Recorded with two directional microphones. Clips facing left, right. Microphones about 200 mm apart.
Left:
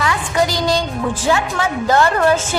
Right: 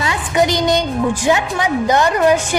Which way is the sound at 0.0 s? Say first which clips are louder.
Right 1 dB; 20° right (ahead or behind).